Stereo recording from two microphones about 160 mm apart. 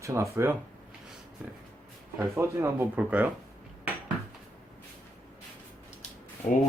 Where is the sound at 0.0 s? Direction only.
20° right (ahead or behind).